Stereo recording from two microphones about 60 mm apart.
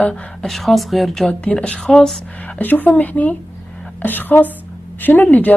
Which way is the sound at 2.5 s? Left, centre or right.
Left.